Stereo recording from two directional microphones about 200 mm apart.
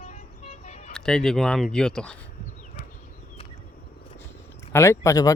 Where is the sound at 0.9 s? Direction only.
5° left (ahead or behind).